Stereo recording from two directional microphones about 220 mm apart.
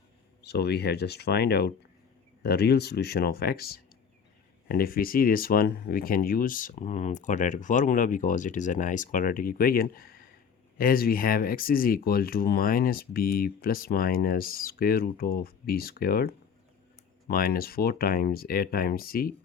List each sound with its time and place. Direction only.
0.4 s speech: 45° left (ahead or behind)